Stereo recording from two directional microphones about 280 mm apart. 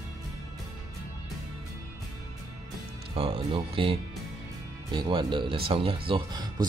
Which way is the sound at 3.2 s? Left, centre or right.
Centre.